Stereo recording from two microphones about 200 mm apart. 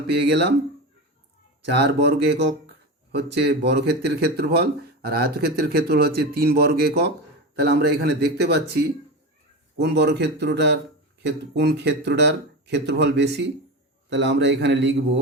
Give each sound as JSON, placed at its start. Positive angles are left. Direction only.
{"t": 0.1, "sound": "speech", "side_deg": -60}
{"t": 1.6, "sound": "speech", "side_deg": -55}